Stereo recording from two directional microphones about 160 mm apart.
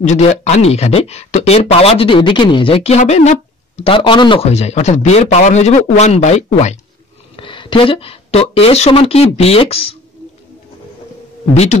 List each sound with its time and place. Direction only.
0.0 s speech: 45° left (ahead or behind)
7.3 s speech: 30° left (ahead or behind)
11.5 s speech: 45° left (ahead or behind)